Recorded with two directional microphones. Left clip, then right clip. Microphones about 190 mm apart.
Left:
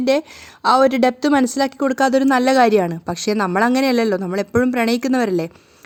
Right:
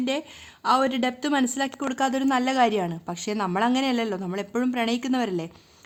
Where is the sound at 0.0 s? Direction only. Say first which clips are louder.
Left 10 dB; 30° left (ahead or behind).